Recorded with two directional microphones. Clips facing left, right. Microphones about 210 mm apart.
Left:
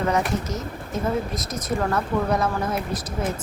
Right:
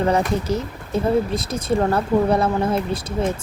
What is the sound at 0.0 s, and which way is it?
Speech, 30° right (ahead or behind).